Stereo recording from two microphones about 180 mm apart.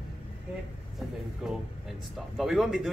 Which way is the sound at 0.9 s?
5° right (ahead or behind).